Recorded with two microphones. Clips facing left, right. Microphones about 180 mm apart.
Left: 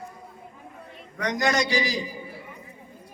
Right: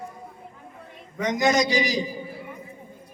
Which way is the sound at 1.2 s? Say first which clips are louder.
Right 3 dB; 20° right (ahead or behind).